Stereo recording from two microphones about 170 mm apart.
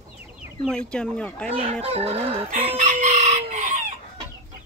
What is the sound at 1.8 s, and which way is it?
Chicken, 35° right (ahead or behind).